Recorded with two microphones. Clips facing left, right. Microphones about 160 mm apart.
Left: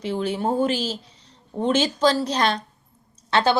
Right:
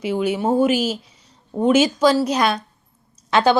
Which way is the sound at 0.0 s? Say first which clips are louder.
Right 4 dB; 10° right (ahead or behind).